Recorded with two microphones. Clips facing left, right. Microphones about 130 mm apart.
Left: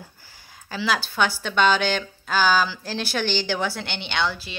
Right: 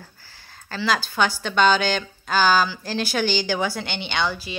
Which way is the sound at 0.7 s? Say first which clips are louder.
Right 1 dB; 5° left (ahead or behind).